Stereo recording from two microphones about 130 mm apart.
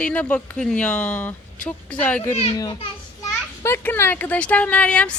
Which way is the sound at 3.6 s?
15° left (ahead or behind).